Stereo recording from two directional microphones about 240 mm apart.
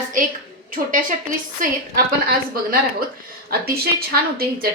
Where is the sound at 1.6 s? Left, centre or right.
Right.